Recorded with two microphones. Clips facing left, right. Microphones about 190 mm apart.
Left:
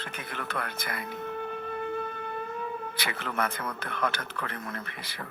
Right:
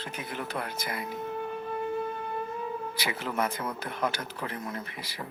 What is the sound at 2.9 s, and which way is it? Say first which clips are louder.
A man's voice: right 1 dB; 60° left (ahead or behind).